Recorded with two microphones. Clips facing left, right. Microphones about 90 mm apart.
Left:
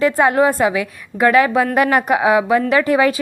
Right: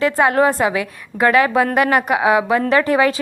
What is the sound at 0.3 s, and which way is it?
Speech, 20° left (ahead or behind).